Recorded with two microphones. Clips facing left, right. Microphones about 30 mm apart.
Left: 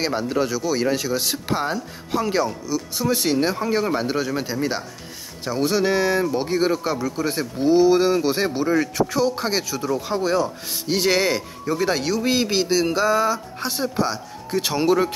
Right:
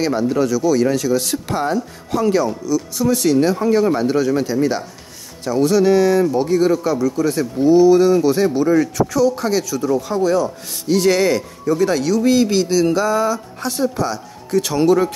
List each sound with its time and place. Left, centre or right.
0.0 s speech: left
3.5 s speech: centre